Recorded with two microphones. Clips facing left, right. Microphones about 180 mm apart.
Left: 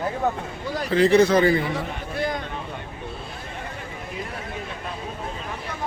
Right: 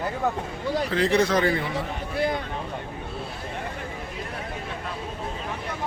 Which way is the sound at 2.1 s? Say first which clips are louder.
Right 1 dB; 25° right (ahead or behind).